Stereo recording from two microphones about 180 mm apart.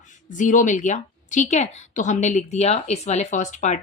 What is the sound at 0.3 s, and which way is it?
A woman's voice, 45° left (ahead or behind).